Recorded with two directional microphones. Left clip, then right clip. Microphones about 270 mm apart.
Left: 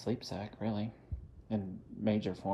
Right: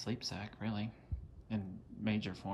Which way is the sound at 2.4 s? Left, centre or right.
Right.